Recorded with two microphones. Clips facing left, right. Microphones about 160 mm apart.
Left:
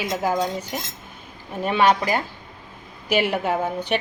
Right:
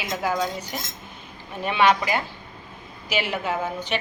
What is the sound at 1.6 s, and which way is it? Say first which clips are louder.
Speech: left 1 dB; 40° left (ahead or behind).